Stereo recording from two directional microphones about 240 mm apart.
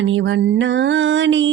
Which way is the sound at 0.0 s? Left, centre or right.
Right.